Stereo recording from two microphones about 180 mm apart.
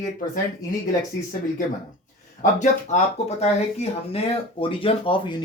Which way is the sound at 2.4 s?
45° left (ahead or behind).